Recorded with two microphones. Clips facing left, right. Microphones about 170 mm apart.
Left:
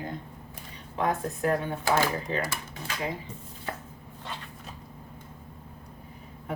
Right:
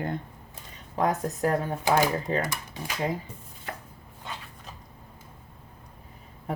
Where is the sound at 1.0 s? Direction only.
35° right (ahead or behind).